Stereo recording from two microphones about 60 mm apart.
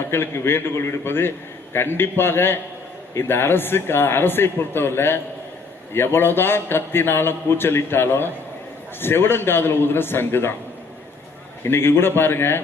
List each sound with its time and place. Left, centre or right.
0.1 s a man's voice: left
11.6 s a man's voice: left